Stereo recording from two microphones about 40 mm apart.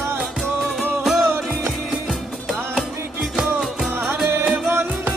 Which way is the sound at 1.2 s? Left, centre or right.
Right.